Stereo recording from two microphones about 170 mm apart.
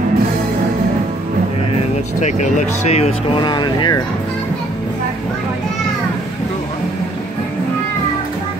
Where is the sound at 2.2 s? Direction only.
45° left (ahead or behind); by 4.0 s 25° left (ahead or behind).